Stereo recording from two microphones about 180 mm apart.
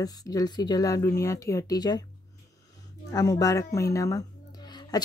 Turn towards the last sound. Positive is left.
turn(degrees=25)  # may be behind; listen again after turning